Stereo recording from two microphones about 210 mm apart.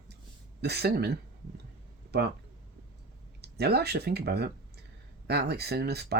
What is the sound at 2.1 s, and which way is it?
Speech, 50° right (ahead or behind).